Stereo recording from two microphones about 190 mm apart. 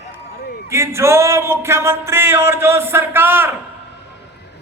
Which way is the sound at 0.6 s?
15° right (ahead or behind).